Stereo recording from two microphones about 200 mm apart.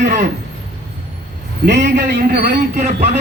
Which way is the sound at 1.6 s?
60° right (ahead or behind).